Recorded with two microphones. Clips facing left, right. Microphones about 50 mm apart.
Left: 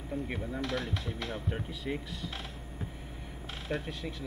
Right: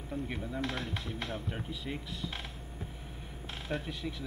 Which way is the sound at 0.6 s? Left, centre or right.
Right.